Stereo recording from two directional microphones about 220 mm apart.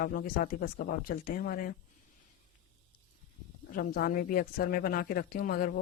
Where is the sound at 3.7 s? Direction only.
40° left (ahead or behind).